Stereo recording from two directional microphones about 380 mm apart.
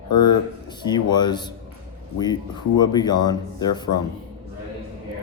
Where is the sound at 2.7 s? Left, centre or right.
Centre.